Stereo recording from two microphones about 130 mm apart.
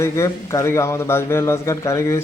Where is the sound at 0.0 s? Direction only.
20° left (ahead or behind).